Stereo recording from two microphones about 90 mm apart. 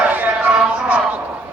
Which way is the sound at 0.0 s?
15° right (ahead or behind).